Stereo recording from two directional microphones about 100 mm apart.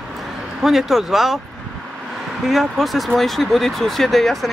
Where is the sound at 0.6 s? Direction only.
5° right (ahead or behind).